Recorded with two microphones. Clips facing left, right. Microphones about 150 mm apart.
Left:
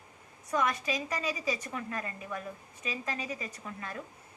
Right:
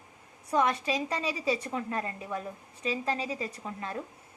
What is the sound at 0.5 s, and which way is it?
A woman's voice, 30° right (ahead or behind).